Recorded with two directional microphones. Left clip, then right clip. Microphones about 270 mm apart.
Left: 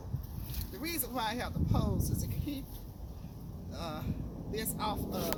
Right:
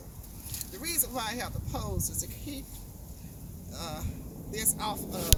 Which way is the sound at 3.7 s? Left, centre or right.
Right.